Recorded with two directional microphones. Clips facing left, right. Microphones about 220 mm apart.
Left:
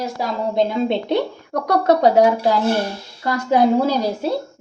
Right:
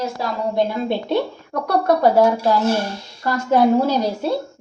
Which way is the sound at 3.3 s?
15° left (ahead or behind).